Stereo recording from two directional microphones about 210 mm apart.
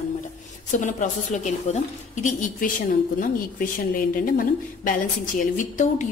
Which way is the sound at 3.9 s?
40° left (ahead or behind).